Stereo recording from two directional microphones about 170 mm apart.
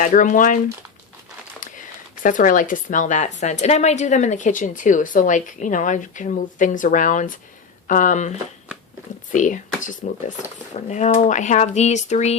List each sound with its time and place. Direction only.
0.0 s a woman's voice: 50° left (ahead or behind)
2.2 s a woman's voice: 50° left (ahead or behind)
9.3 s a woman's voice: 50° left (ahead or behind)